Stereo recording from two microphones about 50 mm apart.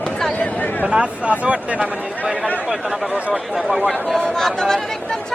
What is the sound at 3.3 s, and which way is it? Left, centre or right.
Speech, centre.